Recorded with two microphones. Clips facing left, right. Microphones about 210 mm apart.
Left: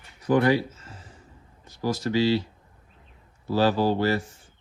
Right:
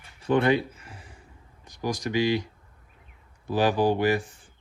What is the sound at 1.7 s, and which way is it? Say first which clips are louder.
Speech: left 3 dB; 15° right (ahead or behind).